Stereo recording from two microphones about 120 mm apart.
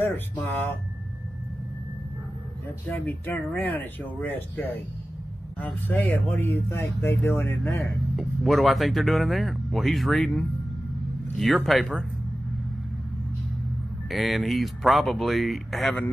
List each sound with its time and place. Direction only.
2.9 s speech: 15° left (ahead or behind)
7.6 s speech: centre (ahead or behind)
14.1 s speech: centre (ahead or behind)